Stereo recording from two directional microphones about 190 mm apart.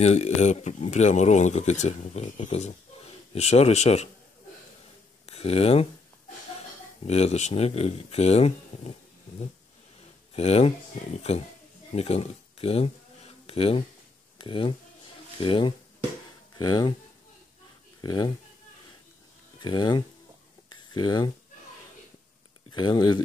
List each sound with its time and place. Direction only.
0.0 s speech: 35° left (ahead or behind)
5.2 s speech: 30° left (ahead or behind)
7.0 s speech: 35° left (ahead or behind)
10.3 s speech: 35° left (ahead or behind)
18.0 s speech: 20° left (ahead or behind)
19.6 s speech: 25° left (ahead or behind)
22.8 s speech: 25° left (ahead or behind)